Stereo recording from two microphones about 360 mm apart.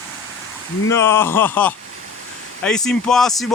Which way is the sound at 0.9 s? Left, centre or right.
Centre.